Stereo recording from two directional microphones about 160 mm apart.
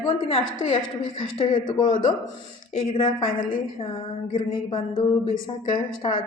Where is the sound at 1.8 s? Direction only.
55° left (ahead or behind).